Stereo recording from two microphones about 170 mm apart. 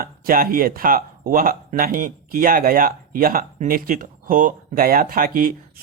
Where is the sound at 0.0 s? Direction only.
55° right (ahead or behind).